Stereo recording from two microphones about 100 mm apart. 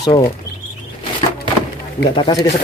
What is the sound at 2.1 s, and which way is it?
Speech, 50° left (ahead or behind).